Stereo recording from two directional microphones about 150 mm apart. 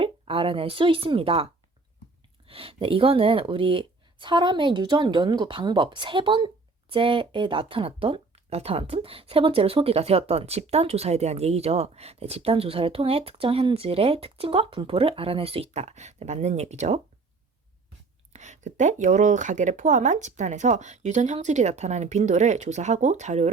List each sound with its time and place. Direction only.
0.0 s speech: 35° right (ahead or behind)
2.5 s speech: 40° right (ahead or behind)
18.3 s speech: 50° right (ahead or behind)